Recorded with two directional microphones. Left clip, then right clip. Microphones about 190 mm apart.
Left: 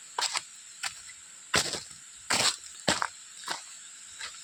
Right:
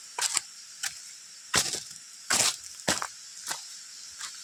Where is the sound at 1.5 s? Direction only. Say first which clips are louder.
Even; 30° left (ahead or behind).